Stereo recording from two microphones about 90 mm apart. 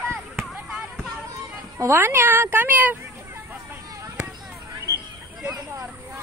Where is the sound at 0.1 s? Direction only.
5° right (ahead or behind).